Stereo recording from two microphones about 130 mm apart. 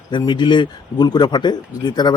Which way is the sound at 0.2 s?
35° left (ahead or behind).